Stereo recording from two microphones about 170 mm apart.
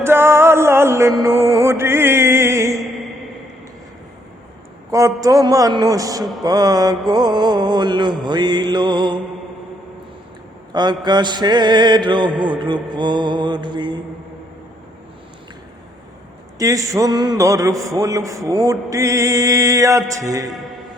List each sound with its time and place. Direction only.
0.0 s music: 15° right (ahead or behind)
4.9 s mantra: 20° right (ahead or behind)
10.7 s mantra: 25° right (ahead or behind)
16.6 s mantra: 20° right (ahead or behind)